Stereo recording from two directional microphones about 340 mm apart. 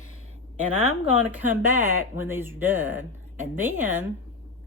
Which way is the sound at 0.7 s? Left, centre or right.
Left.